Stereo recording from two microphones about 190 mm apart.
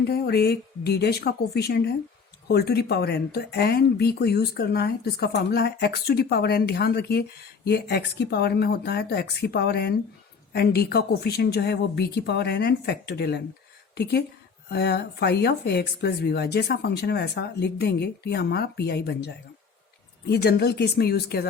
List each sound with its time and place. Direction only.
0.1 s a woman's voice: 55° left (ahead or behind)